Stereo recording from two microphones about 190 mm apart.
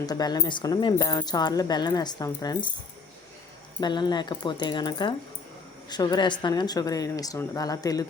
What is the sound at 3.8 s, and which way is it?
A woman's voice, 25° left (ahead or behind).